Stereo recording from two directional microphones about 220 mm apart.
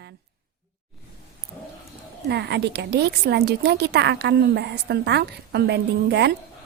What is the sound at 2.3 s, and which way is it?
Speech, 50° right (ahead or behind).